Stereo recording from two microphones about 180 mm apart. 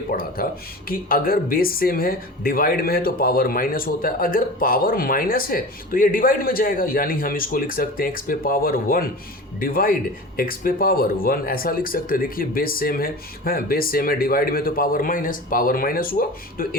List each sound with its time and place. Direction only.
0.1 s speech: 55° left (ahead or behind)